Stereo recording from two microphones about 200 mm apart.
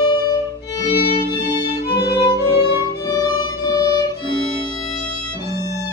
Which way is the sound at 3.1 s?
20° left (ahead or behind).